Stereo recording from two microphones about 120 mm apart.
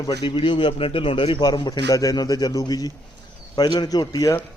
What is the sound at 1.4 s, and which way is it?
A man's voice, 35° left (ahead or behind).